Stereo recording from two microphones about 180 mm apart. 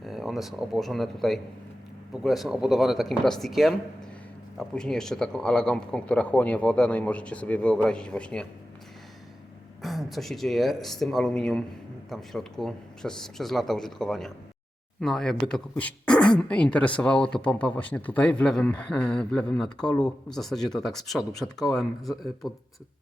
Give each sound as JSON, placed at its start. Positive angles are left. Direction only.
{"t": 0.0, "sound": "speech", "side_deg": 0}
{"t": 9.8, "sound": "speech", "side_deg": 0}